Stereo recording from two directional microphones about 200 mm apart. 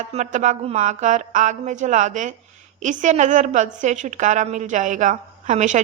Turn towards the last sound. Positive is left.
turn(degrees=-35)  # may be behind; listen again after turning